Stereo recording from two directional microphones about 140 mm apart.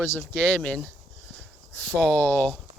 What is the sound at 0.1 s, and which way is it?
Speech, 15° left (ahead or behind).